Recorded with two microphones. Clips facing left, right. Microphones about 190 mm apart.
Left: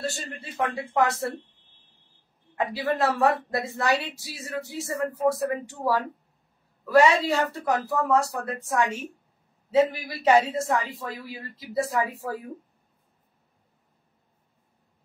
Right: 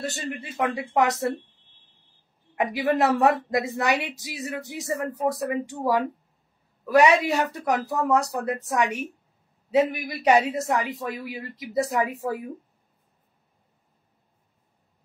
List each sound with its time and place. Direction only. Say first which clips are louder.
0.0 s a woman's voice: right 2 dB; 20° right (ahead or behind)
2.5 s a woman's voice: right 3 dB; 20° right (ahead or behind)
7.2 s a woman's voice: even; 20° right (ahead or behind)